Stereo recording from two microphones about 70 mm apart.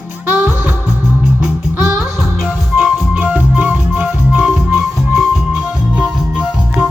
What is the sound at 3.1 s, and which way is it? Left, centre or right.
Music, right.